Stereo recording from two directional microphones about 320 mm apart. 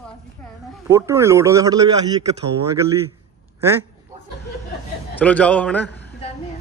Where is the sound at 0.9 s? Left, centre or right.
Centre.